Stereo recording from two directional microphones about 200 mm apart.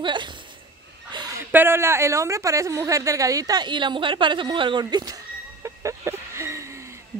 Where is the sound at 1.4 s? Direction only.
10° right (ahead or behind).